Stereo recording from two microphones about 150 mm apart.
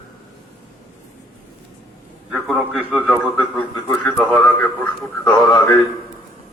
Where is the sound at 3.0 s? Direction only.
10° left (ahead or behind).